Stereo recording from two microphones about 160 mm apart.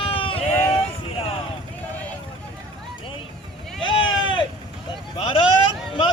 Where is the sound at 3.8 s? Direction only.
30° left (ahead or behind).